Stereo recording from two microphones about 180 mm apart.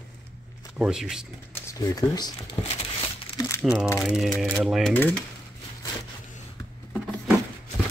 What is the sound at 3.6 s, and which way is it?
Speech, 5° right (ahead or behind).